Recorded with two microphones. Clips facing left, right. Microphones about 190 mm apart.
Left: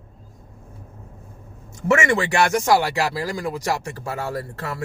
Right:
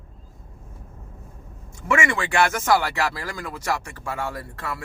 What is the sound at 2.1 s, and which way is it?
Speech, 25° left (ahead or behind).